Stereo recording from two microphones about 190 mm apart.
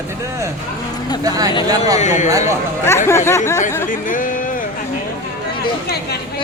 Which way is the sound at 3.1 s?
15° left (ahead or behind).